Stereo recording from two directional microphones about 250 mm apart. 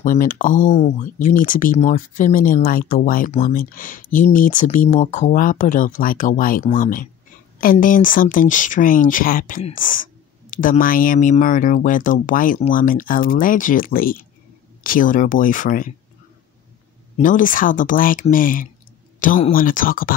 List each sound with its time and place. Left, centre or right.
0.0 s speech: left
17.2 s speech: left